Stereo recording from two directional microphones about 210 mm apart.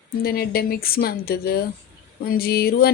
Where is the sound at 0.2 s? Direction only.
45° left (ahead or behind).